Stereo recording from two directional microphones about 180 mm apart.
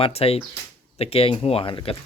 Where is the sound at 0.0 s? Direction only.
35° left (ahead or behind).